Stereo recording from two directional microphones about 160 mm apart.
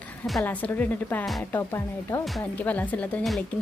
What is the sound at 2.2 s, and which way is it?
Speech, 5° left (ahead or behind).